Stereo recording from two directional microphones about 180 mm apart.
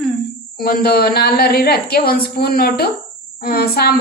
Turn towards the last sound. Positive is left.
turn(degrees=60)  # may be behind; listen again after turning